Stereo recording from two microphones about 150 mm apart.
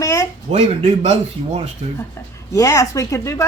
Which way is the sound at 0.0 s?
20° left (ahead or behind).